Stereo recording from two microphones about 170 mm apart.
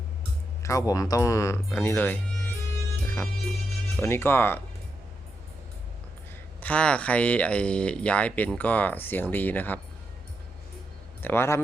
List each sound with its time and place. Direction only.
0.6 s speech: 20° left (ahead or behind)
3.9 s speech: 15° left (ahead or behind)
6.6 s speech: 5° left (ahead or behind)
11.2 s speech: 15° left (ahead or behind)